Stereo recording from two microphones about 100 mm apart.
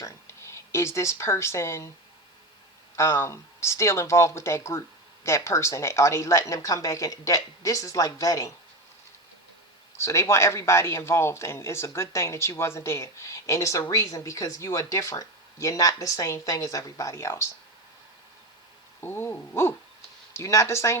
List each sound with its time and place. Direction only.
0.0 s speech: 30° left (ahead or behind)
2.9 s speech: 25° left (ahead or behind)
10.0 s speech: 30° left (ahead or behind)
18.9 s speech: 25° left (ahead or behind)